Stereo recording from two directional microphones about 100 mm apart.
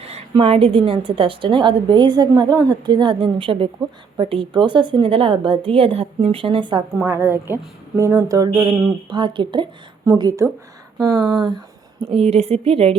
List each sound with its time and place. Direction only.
0.3 s a woman's voice: 70° right (ahead or behind); by 6.8 s 55° right (ahead or behind)
7.1 s speech: 25° right (ahead or behind); by 9.6 s 55° right (ahead or behind)
10.1 s speech: 40° right (ahead or behind)
12.0 s speech: 90° right